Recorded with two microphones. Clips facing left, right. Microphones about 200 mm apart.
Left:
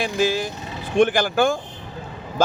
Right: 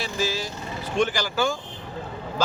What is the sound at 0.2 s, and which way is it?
Speech, 55° left (ahead or behind).